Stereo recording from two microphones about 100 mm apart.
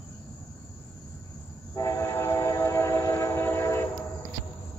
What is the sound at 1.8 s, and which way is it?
Train, 30° left (ahead or behind).